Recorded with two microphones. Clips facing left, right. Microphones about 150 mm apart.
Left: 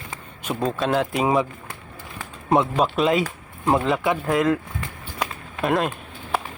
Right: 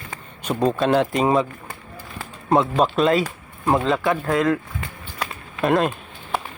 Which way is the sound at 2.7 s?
Centre (ahead or behind).